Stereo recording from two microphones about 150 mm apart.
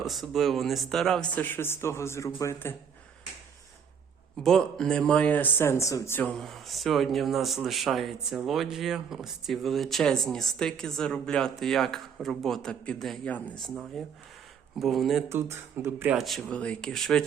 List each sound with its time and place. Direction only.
0.0 s speech: centre (ahead or behind); by 2.7 s 15° left (ahead or behind)
4.4 s speech: 5° left (ahead or behind); by 6.1 s 20° left (ahead or behind)
6.1 s speech: 5° left (ahead or behind)
15.3 s speech: 15° right (ahead or behind)
16.1 s speech: centre (ahead or behind)